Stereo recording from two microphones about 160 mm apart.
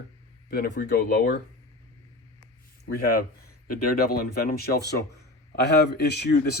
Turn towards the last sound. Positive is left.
turn(degrees=85)